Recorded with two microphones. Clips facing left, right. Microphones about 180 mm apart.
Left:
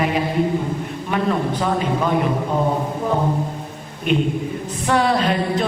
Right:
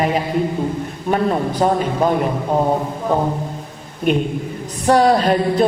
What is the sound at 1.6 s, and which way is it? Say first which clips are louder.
Speech: right 8 dB; 40° right (ahead or behind).